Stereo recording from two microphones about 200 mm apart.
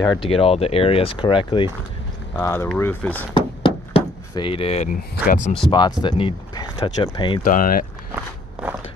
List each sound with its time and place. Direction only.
0.0 s speech: 15° left (ahead or behind)
0.3 s speech: 30° left (ahead or behind)
2.3 s speech: 10° left (ahead or behind)
3.3 s a sound: 25° left (ahead or behind); by 5.5 s 40° left (ahead or behind)
5.7 s speech: 20° left (ahead or behind)
7.4 s speech: 45° left (ahead or behind)